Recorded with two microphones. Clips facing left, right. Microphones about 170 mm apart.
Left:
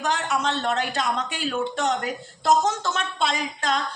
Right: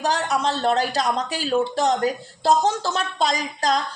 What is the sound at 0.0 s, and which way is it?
A woman's voice, 35° right (ahead or behind).